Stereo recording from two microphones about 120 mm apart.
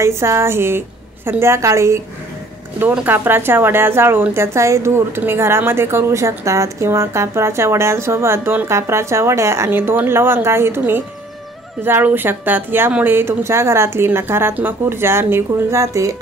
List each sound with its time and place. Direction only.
0.0 s speech: 25° right (ahead or behind)